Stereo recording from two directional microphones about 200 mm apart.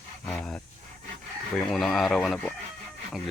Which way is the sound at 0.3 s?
5° left (ahead or behind).